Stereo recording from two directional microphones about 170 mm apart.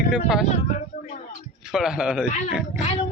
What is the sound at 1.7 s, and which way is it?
Speech, 5° right (ahead or behind).